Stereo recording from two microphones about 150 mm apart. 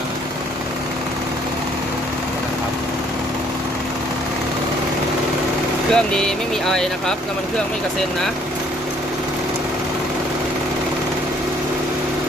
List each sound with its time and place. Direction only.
5.9 s speech: 5° left (ahead or behind)